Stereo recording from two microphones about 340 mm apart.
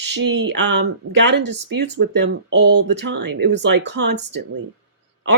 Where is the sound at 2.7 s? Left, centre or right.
Right.